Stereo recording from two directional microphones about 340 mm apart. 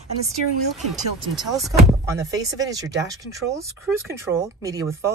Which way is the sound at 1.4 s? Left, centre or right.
Centre.